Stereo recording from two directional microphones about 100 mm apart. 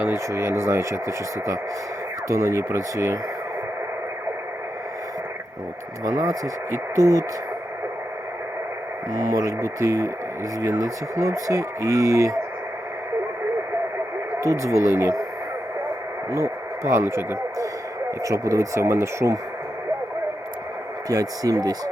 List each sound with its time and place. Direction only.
0.0 s speech: 25° right (ahead or behind)
6.1 s speech: 35° right (ahead or behind)
9.3 s speech: 35° right (ahead or behind)
14.4 s speech: 30° right (ahead or behind)
16.3 s speech: 30° right (ahead or behind)
21.1 s speech: 35° right (ahead or behind)